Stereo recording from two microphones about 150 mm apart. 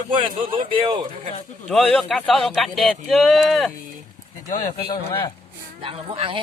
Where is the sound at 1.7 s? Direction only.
Centre (ahead or behind).